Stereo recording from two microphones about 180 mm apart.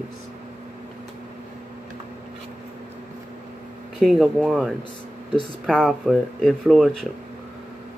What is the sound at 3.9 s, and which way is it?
Speech, centre (ahead or behind).